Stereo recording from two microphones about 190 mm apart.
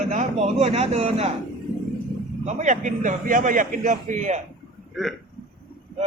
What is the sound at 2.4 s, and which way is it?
A man's voice, 40° right (ahead or behind).